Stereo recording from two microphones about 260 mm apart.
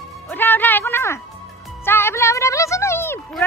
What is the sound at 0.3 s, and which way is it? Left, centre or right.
Music, centre.